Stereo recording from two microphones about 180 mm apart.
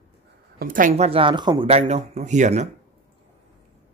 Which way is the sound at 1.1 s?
30° right (ahead or behind).